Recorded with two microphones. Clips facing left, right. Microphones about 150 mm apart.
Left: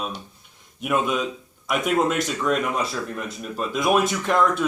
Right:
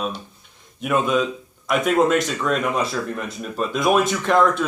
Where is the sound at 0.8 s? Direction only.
5° left (ahead or behind).